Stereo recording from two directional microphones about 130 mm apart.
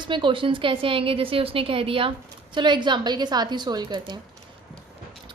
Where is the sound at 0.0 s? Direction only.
40° right (ahead or behind).